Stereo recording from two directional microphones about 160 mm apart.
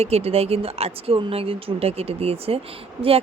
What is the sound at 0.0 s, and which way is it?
Speech, 40° right (ahead or behind).